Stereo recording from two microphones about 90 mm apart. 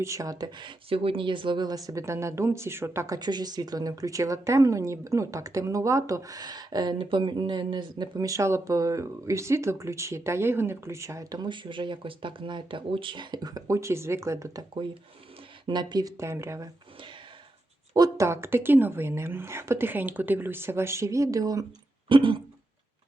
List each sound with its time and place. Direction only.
0.0 s a woman's voice: 35° right (ahead or behind)
3.2 s a woman's voice: 55° right (ahead or behind)
7.0 s speech: 65° right (ahead or behind)
8.3 s a woman's voice: 30° right (ahead or behind)
11.3 s speech: 55° right (ahead or behind); by 13.2 s 70° right (ahead or behind)
13.3 s a woman's voice: 45° right (ahead or behind)
15.6 s speech: 55° right (ahead or behind)
16.1 s a woman's voice: 30° right (ahead or behind)
18.2 s speech: 30° right (ahead or behind)
22.1 s speech: 65° right (ahead or behind)